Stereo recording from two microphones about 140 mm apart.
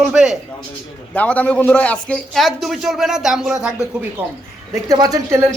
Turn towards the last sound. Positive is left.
turn(degrees=-25)  # may be behind; listen again after turning